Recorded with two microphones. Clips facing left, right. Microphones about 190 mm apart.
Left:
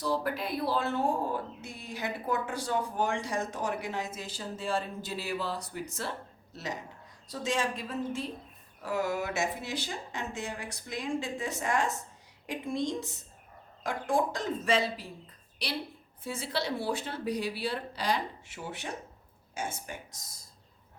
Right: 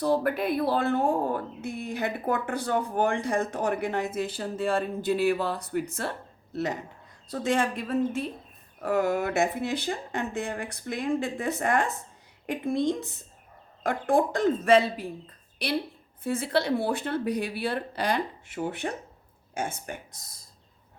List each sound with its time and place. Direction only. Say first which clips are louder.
0.0 s speech: right 6 dB; 55° right (ahead or behind)